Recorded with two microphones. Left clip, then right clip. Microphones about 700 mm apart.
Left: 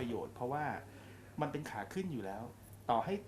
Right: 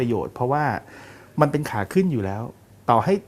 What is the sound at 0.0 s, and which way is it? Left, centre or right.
Speech, right.